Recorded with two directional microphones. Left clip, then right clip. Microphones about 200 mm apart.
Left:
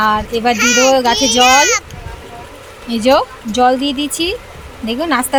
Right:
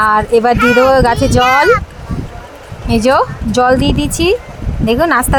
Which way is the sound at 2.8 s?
25° right (ahead or behind).